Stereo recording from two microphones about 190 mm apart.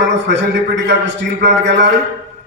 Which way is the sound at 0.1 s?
70° right (ahead or behind).